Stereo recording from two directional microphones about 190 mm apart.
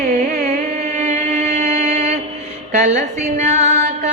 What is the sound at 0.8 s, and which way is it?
Mantra, 40° right (ahead or behind).